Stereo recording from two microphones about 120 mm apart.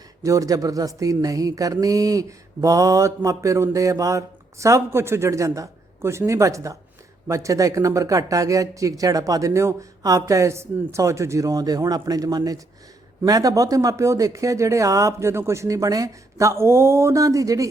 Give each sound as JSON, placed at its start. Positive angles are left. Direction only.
{"t": 0.2, "sound": "speech", "side_deg": -25}